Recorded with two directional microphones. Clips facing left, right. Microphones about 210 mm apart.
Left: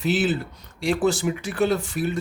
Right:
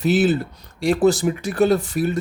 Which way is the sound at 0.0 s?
40° right (ahead or behind).